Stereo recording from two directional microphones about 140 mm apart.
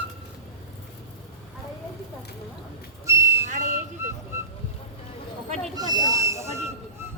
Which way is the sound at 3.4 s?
60° right (ahead or behind).